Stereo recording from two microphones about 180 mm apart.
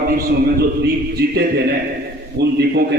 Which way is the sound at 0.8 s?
65° right (ahead or behind).